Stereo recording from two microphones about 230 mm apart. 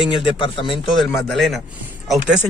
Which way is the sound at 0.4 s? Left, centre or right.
Left.